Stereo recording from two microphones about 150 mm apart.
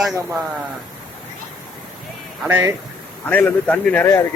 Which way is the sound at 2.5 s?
15° right (ahead or behind).